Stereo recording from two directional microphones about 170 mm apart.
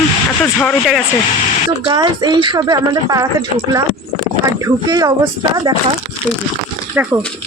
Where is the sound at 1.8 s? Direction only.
25° right (ahead or behind).